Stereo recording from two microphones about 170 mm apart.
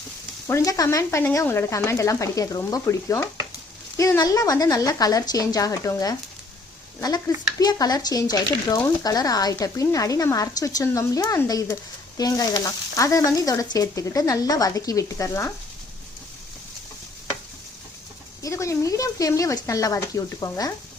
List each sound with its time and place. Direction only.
0.4 s speech: 20° left (ahead or behind)
7.6 s speech: 20° left (ahead or behind)
18.4 s speech: 15° left (ahead or behind)